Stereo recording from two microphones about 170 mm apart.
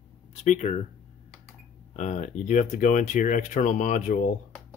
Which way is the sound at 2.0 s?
45° left (ahead or behind).